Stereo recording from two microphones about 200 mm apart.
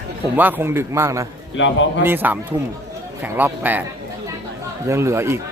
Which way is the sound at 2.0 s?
10° right (ahead or behind).